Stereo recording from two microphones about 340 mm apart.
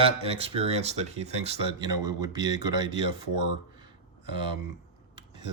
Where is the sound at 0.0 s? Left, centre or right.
Centre.